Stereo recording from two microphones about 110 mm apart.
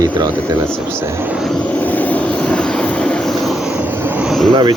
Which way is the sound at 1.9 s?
10° left (ahead or behind).